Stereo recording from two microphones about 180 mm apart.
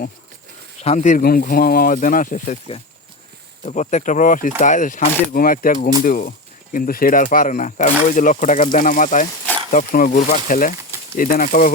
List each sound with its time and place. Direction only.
0.8 s speech: 40° left (ahead or behind)